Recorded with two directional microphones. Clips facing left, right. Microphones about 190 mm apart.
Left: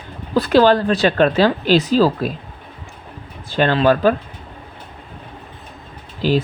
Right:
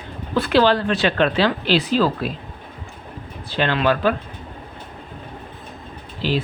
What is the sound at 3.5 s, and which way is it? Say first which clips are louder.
Speech: left 5 dB; 45° left (ahead or behind).